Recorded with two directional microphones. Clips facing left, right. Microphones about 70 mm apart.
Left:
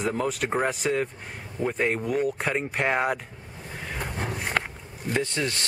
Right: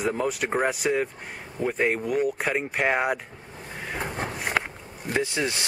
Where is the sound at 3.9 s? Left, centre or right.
Right.